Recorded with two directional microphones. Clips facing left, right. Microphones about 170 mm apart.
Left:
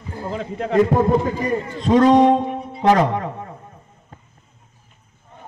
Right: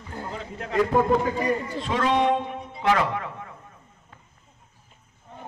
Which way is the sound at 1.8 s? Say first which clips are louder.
Left 13 dB; 40° left (ahead or behind).